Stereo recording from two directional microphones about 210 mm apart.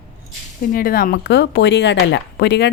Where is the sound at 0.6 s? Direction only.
45° left (ahead or behind).